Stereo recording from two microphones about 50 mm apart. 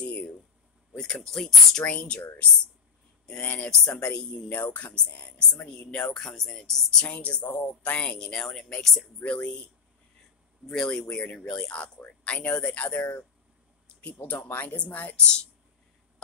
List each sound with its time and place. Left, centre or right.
0.0 s a sound: left
0.9 s speech: left
1.2 s speech: centre
1.9 s speech: left
5.7 s speech: centre
7.1 s speech: left; by 8.7 s centre
9.2 s speech: left
10.7 s speech: centre
14.1 s speech: left
14.8 s speech: left